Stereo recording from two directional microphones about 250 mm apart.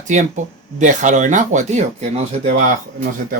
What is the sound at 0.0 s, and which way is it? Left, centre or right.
Speech, right.